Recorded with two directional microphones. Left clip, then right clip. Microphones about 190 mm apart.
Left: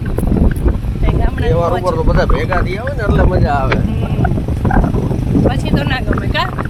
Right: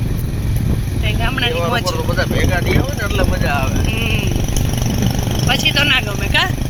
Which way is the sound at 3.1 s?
65° left (ahead or behind).